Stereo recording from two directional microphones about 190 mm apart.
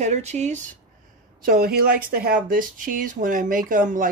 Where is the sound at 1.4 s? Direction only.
50° right (ahead or behind).